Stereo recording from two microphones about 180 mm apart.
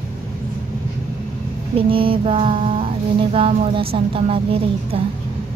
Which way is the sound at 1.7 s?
30° right (ahead or behind).